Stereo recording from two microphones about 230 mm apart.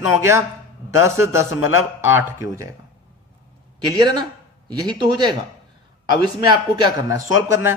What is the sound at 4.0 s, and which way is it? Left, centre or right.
A man's voice, centre.